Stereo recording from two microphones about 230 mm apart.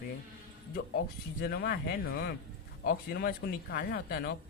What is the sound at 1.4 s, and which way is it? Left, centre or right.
Speech, left.